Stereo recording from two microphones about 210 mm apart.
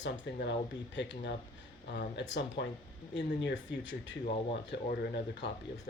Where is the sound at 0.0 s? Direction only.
55° left (ahead or behind).